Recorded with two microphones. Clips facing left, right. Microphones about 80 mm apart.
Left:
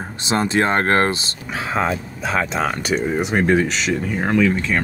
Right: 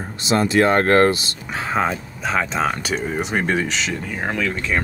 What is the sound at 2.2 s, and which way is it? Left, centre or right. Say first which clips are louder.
Speech: even; centre.